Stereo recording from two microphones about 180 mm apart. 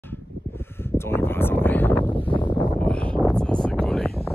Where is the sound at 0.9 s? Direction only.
10° left (ahead or behind).